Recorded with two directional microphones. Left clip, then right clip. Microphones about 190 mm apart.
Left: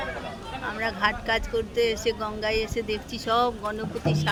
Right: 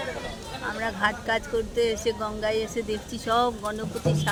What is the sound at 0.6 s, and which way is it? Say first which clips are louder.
Speech: even; 10° right (ahead or behind).